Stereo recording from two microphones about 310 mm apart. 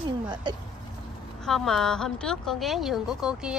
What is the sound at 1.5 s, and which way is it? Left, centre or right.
A woman's voice, centre.